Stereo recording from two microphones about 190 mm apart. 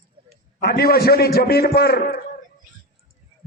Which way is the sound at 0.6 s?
55° left (ahead or behind).